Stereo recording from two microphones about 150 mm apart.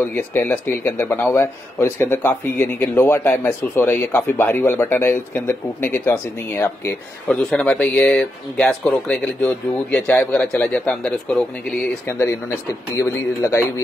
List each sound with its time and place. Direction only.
0.1 s speech: 10° left (ahead or behind)
12.1 s speech: 20° left (ahead or behind)